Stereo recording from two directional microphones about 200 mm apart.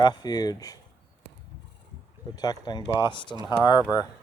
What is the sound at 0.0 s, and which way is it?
Speech, 20° left (ahead or behind).